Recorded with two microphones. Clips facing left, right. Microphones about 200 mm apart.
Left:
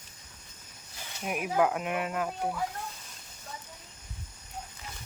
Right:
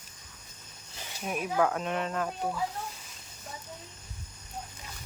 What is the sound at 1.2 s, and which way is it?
Speech, 15° left (ahead or behind).